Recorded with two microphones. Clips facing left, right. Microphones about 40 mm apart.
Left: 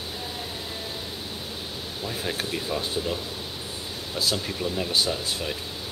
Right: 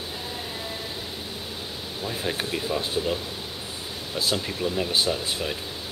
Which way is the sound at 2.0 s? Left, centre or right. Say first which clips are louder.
Right 1 dB; centre.